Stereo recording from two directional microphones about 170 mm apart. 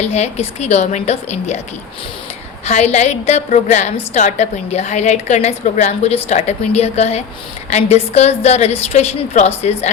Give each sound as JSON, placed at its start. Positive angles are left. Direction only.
{"t": 0.0, "sound": "a woman's voice", "side_deg": 40}
{"t": 2.6, "sound": "a woman's voice", "side_deg": 40}